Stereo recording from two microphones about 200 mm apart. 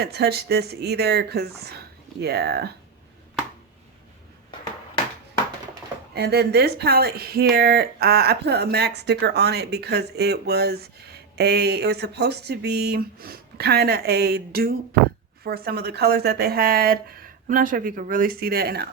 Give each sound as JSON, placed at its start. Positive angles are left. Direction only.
{"t": 0.0, "sound": "speech", "side_deg": -55}
{"t": 6.1, "sound": "speech", "side_deg": -55}